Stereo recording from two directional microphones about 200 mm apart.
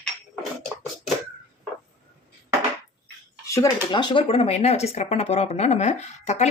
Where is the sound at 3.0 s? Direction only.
15° left (ahead or behind).